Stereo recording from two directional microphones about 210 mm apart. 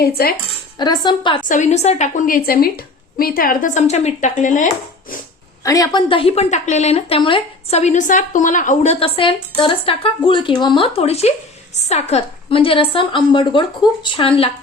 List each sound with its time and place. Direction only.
0.0 s cutlery: 45° left (ahead or behind)
0.8 s speech: 20° left (ahead or behind)
1.5 s a woman's voice: 35° left (ahead or behind)
5.6 s speech: 15° left (ahead or behind)